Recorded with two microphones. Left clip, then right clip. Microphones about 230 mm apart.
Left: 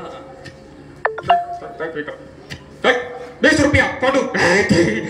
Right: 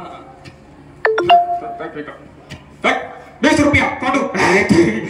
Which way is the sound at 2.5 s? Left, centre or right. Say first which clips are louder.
Left 1 dB; right.